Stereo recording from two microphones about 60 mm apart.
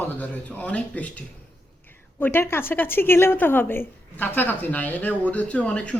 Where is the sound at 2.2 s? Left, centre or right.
Left.